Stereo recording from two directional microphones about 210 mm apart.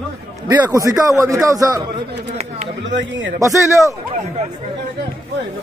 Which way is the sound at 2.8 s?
60° right (ahead or behind).